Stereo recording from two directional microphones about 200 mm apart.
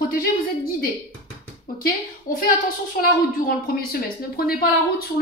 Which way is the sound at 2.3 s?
45° left (ahead or behind).